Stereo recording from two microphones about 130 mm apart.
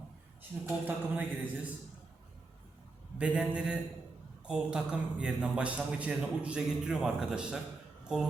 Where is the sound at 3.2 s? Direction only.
10° right (ahead or behind).